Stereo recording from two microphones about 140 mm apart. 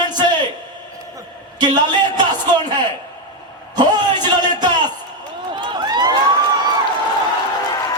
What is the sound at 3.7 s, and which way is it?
Speech, 30° right (ahead or behind).